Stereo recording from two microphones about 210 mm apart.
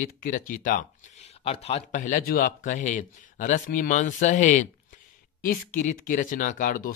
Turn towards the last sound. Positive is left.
turn(degrees=40)  # may be behind; listen again after turning